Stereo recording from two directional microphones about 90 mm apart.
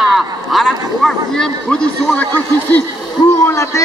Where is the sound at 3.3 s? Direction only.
35° left (ahead or behind).